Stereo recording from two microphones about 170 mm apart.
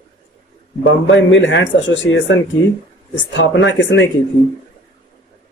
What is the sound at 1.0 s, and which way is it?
Speech, 90° left.